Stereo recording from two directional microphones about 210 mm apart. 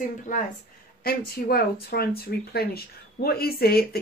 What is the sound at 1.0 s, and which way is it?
Speech, 45° left (ahead or behind).